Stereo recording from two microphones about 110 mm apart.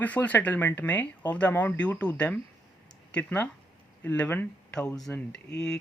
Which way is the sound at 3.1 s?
10° left (ahead or behind).